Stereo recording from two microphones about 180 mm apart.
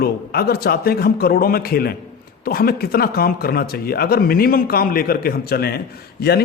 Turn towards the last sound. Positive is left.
turn(degrees=60)  # may be behind; listen again after turning